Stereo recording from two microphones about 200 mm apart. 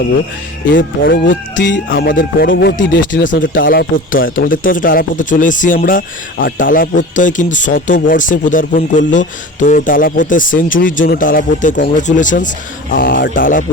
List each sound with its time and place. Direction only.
1.3 s speech: 65° left (ahead or behind)
3.7 s speech: 45° left (ahead or behind)